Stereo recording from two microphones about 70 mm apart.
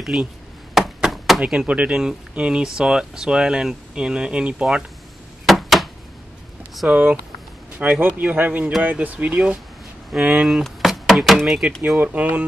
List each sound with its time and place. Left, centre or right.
0.1 s speech: centre
0.7 s a sound: centre
1.4 s speech: centre
5.5 s a sound: centre
6.9 s speech: right
10.5 s speech: centre
12.0 s speech: right